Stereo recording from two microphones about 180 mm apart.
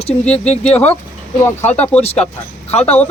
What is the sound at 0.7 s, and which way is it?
Speech, 35° left (ahead or behind).